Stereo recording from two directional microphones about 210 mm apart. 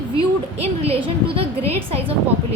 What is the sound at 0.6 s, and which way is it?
Speech, 30° right (ahead or behind).